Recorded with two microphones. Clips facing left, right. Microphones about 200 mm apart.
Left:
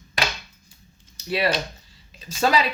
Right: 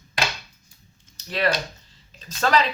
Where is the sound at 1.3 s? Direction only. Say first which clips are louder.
Left 1 dB; 10° left (ahead or behind).